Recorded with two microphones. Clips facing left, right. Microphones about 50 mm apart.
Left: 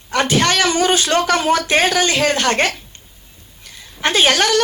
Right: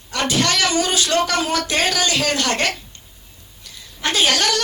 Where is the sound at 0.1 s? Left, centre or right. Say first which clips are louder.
Left 4 dB; left.